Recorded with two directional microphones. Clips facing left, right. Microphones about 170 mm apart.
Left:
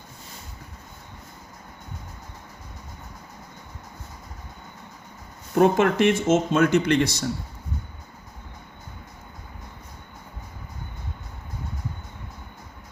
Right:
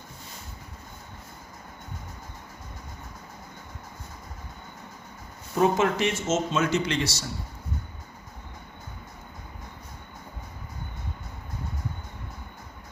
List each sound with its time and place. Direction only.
5.5 s speech: 55° left (ahead or behind)